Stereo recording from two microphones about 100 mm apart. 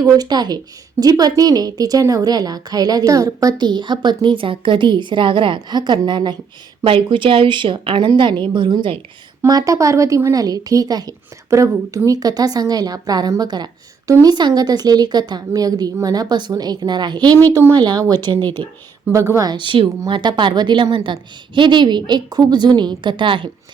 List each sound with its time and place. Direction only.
0.0 s a woman's voice: 40° right (ahead or behind)
9.5 s a woman's voice: 35° right (ahead or behind)
18.4 s speech: 20° left (ahead or behind)
19.1 s a woman's voice: 30° right (ahead or behind)
19.5 s a woman's voice: 50° right (ahead or behind)